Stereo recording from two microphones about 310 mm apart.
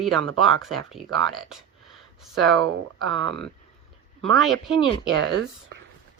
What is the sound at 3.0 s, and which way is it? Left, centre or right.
Speech, right.